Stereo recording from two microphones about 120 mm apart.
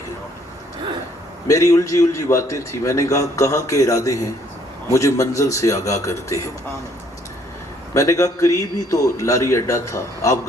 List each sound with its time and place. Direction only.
1.5 s a man's voice: 25° left (ahead or behind)
7.9 s a man's voice: 25° left (ahead or behind)